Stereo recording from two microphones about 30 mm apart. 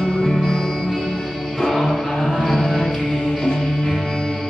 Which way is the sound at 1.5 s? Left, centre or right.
Centre.